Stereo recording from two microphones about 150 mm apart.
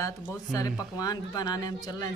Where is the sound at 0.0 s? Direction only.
25° left (ahead or behind).